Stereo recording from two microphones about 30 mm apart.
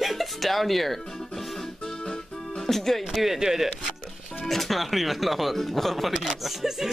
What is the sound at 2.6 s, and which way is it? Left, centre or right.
Music, centre.